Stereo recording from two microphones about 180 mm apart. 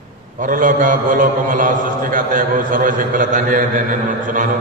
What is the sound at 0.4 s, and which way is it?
A man's voice, 50° right (ahead or behind).